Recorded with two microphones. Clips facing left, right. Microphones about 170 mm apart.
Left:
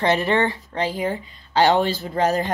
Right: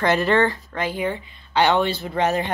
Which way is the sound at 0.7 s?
35° left (ahead or behind).